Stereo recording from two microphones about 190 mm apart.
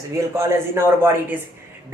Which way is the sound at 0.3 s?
15° right (ahead or behind).